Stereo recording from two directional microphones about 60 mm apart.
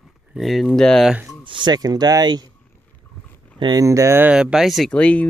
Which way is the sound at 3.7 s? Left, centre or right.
Right.